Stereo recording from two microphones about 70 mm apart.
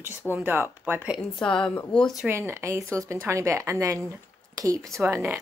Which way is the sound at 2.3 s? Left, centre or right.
Right.